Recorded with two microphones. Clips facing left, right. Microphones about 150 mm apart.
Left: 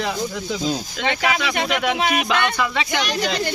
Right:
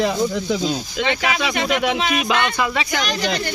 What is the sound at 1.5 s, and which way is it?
Speech, 50° left (ahead or behind).